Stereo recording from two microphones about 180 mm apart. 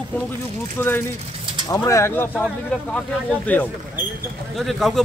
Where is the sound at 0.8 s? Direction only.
10° left (ahead or behind).